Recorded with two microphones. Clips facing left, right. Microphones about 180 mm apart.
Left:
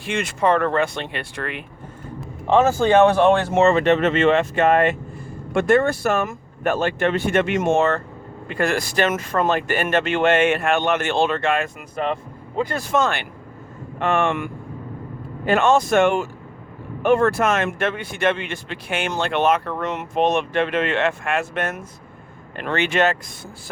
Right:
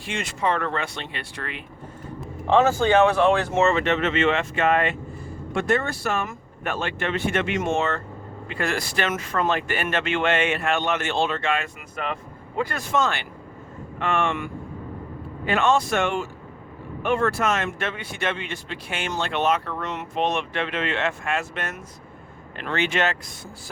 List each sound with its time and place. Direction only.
0.1 s speech: 55° left (ahead or behind)
2.6 s speech: 35° left (ahead or behind)
12.5 s speech: 20° left (ahead or behind)
12.9 s speech: 50° left (ahead or behind)
15.4 s speech: 45° left (ahead or behind)